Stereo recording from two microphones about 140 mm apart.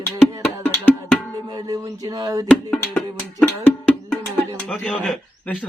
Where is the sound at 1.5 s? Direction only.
25° right (ahead or behind).